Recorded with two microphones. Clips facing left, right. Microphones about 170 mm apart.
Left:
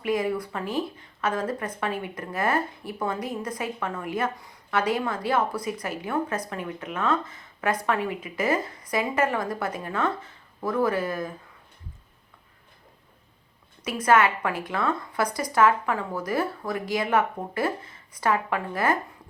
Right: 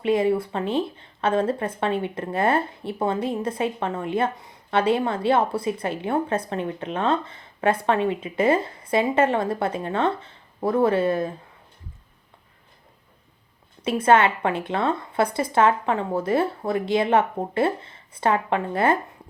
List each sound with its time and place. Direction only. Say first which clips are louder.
0.0 s speech: right 5 dB; 25° right (ahead or behind)
13.8 s speech: right 3 dB; 25° right (ahead or behind)